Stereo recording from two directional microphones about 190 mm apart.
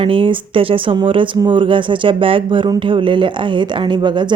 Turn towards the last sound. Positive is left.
turn(degrees=-25)  # may be behind; listen again after turning